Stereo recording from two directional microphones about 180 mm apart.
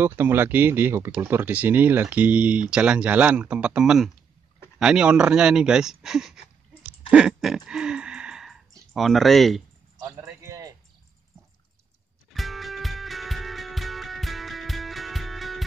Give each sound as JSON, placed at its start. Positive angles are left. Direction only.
{"t": 0.0, "sound": "speech", "side_deg": -10}
{"t": 7.1, "sound": "a sound", "side_deg": -5}
{"t": 9.9, "sound": "a man's voice", "side_deg": -15}
{"t": 12.4, "sound": "music", "side_deg": 0}